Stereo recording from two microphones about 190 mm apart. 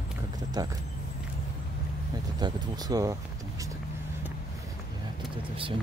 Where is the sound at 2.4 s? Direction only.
20° right (ahead or behind).